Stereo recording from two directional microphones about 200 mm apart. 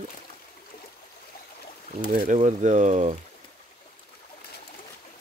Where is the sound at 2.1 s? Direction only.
35° right (ahead or behind).